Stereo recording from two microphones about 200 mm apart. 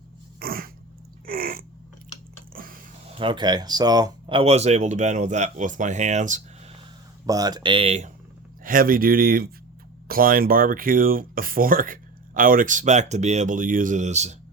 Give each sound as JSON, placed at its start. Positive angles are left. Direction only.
{"t": 0.3, "sound": "dog", "side_deg": -45}
{"t": 1.3, "sound": "a sound", "side_deg": -50}
{"t": 3.2, "sound": "speech", "side_deg": -25}
{"t": 7.3, "sound": "speech", "side_deg": -20}
{"t": 8.6, "sound": "speech", "side_deg": -45}